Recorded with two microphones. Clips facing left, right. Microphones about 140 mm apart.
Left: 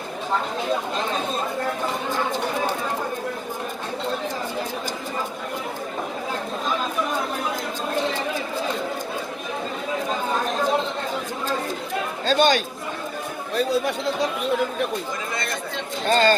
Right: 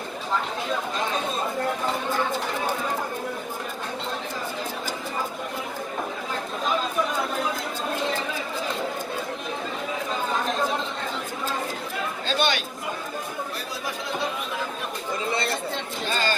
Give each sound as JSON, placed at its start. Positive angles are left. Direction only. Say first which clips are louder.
{"t": 12.3, "sound": "speech", "louder": "left 7 dB", "side_deg": 45}
{"t": 16.1, "sound": "speech", "louder": "left 9 dB", "side_deg": 50}